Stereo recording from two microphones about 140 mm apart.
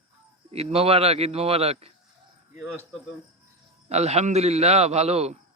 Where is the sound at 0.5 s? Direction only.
45° right (ahead or behind).